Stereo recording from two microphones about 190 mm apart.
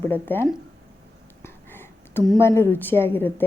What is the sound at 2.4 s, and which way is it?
A woman's voice, 15° left (ahead or behind).